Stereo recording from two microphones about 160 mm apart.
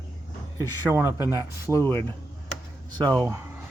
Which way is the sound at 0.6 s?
15° right (ahead or behind).